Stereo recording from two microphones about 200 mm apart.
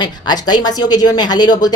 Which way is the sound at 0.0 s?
20° left (ahead or behind).